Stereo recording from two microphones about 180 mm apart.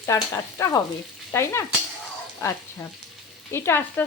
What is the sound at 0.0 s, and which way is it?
A woman's voice, 15° left (ahead or behind).